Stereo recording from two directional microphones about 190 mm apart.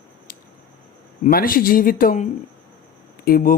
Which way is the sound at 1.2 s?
50° left (ahead or behind).